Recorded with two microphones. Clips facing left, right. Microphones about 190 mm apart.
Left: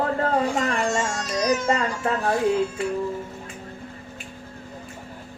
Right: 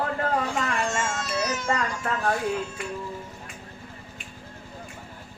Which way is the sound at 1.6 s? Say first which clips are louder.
Left 4 dB; 25° left (ahead or behind).